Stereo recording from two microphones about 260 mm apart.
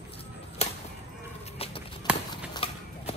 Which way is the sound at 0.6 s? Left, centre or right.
Left.